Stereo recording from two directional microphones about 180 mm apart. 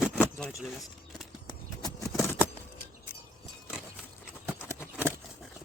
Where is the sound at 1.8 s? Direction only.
20° left (ahead or behind).